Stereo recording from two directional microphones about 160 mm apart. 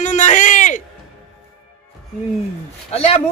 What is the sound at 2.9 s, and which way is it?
Speech, 40° left (ahead or behind).